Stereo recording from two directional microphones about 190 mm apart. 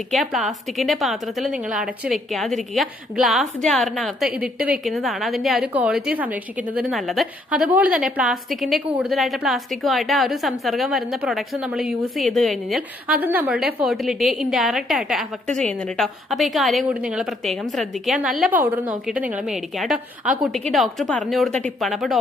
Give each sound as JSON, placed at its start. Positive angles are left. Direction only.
{"t": 0.1, "sound": "a woman's voice", "side_deg": 0}